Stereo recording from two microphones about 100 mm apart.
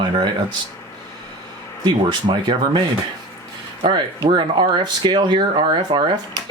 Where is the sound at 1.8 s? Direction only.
50° right (ahead or behind).